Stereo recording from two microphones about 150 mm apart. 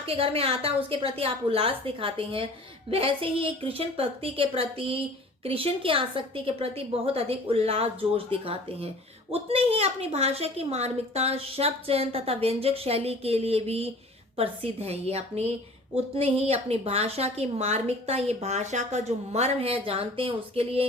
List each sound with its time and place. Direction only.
0.0 s a woman's voice: 40° right (ahead or behind)